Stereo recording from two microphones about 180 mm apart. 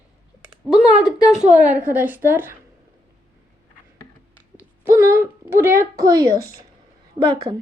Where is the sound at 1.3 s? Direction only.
40° right (ahead or behind).